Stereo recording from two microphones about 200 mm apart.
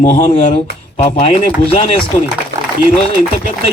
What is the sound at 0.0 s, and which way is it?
Speech, 40° left (ahead or behind).